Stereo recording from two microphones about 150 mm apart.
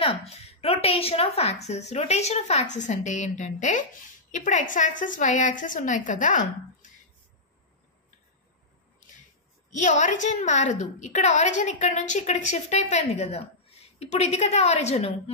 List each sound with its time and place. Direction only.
0.0 s a woman's voice: 40° left (ahead or behind); by 6.9 s 60° left (ahead or behind)
9.7 s a woman's voice: 55° left (ahead or behind)